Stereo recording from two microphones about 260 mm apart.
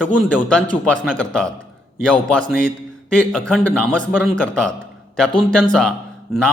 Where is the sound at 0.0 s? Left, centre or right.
Centre.